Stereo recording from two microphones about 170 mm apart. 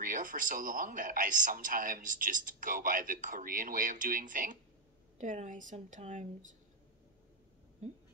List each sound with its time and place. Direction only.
0.0 s speech: 50° right (ahead or behind)